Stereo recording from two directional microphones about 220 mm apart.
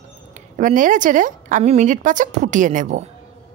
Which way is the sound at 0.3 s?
35° right (ahead or behind).